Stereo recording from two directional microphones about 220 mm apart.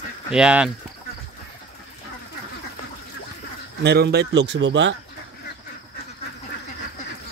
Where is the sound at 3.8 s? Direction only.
45° right (ahead or behind).